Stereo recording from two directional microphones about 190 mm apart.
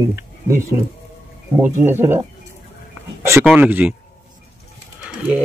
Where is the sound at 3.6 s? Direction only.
10° right (ahead or behind).